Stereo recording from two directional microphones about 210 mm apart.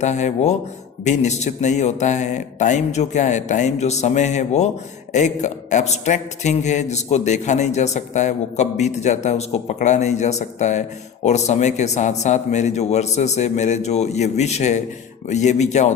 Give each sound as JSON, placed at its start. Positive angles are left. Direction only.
{"t": 0.0, "sound": "a man's voice", "side_deg": 35}